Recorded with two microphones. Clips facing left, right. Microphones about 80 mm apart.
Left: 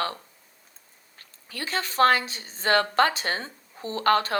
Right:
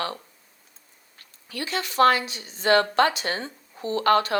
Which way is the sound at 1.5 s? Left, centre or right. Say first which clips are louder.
Right 1 dB; left.